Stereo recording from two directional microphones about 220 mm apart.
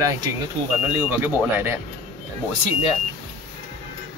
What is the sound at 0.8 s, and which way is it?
Speech, 10° right (ahead or behind).